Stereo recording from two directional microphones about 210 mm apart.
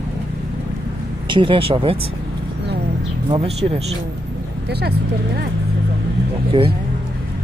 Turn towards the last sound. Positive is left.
turn(degrees=-25)  # may be behind; listen again after turning